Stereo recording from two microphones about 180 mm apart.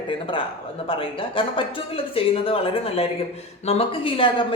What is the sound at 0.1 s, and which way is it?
Speech, 30° left (ahead or behind).